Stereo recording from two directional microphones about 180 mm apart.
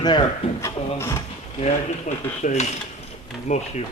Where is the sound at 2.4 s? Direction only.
40° left (ahead or behind).